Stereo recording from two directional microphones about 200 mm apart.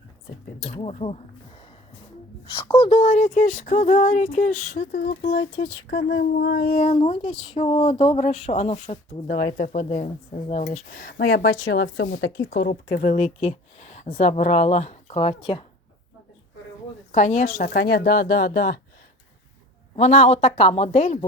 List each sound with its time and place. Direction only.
0.7 s speech: 30° left (ahead or behind)
2.5 s speech: 25° left (ahead or behind)
4.8 s speech: 50° left (ahead or behind)
6.7 s speech: 35° left (ahead or behind)
9.2 s speech: 45° left (ahead or behind); by 12.6 s 65° left (ahead or behind)
12.6 s speech: 45° left (ahead or behind); by 15.6 s 25° left (ahead or behind)
17.1 s speech: 40° left (ahead or behind)
20.0 s speech: 35° left (ahead or behind)